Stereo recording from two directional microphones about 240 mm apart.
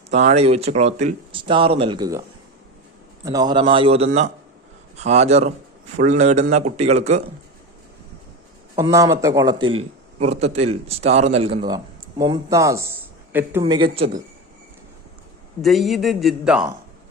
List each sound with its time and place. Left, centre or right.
0.1 s a man's voice: right
3.2 s a man's voice: centre
8.7 s a man's voice: centre
15.6 s a man's voice: centre